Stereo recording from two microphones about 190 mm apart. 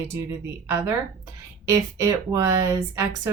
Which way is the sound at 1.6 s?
15° right (ahead or behind).